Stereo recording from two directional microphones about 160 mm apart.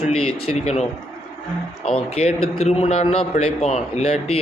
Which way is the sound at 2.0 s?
40° left (ahead or behind).